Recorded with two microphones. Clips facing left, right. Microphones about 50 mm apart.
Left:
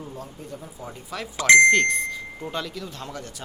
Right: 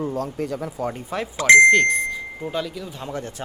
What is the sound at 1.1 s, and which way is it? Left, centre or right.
Speech, right.